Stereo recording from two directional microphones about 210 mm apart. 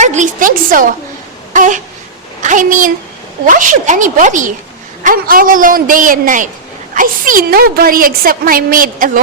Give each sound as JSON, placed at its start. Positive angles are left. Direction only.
{"t": 0.0, "sound": "a man's voice", "side_deg": -35}
{"t": 1.5, "sound": "a sound", "side_deg": -35}
{"t": 2.4, "sound": "a child's voice", "side_deg": -40}